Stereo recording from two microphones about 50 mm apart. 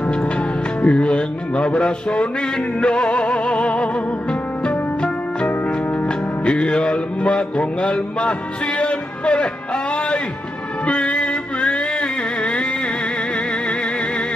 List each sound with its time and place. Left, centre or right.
0.8 s music: left
10.9 s music: left